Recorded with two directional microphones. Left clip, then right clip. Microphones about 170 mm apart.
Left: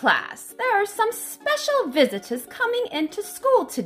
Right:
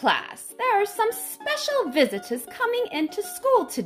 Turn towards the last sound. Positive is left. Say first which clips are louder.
# left 1 dB
turn(degrees=-10)  # may be behind; listen again after turning